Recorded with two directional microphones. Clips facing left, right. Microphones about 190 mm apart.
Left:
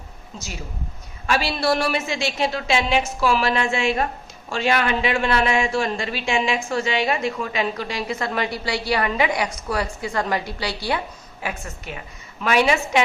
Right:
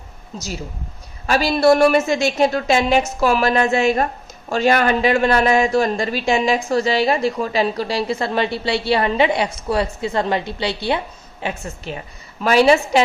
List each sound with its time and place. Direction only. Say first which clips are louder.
0.3 s a woman's voice: right 5 dB; 40° right (ahead or behind)